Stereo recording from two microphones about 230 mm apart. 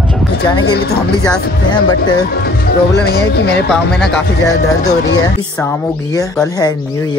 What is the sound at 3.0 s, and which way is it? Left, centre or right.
Speech, left.